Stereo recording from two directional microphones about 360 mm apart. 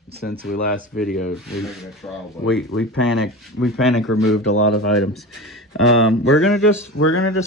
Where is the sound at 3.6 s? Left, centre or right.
Centre.